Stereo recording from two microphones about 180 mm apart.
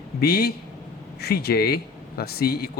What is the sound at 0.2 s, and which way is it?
Speech, 60° left (ahead or behind).